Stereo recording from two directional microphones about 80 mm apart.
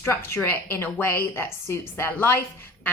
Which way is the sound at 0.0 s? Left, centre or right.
Left.